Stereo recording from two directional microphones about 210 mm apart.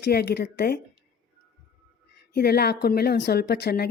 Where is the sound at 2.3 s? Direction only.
50° left (ahead or behind).